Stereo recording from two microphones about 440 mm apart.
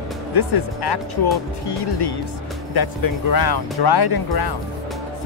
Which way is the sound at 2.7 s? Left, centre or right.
Left.